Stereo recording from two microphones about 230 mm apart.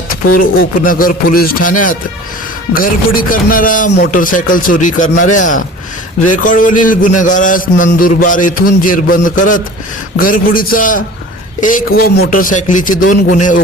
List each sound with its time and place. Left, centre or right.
0.1 s a man's voice: left